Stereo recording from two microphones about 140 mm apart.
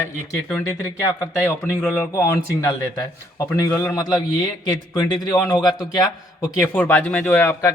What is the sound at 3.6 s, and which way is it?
A man's voice, 20° left (ahead or behind).